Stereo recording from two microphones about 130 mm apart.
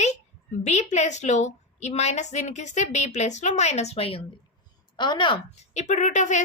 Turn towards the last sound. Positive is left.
turn(degrees=70)  # may be behind; listen again after turning